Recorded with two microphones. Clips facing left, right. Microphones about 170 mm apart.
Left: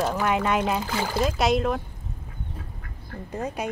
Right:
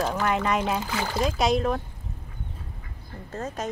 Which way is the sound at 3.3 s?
15° left (ahead or behind).